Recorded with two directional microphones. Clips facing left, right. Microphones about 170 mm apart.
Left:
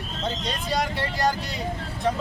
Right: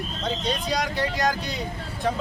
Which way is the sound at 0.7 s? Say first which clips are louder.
Left 2 dB; centre (ahead or behind).